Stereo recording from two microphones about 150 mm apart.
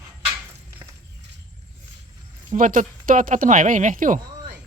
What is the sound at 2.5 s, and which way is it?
Speech, 60° right (ahead or behind).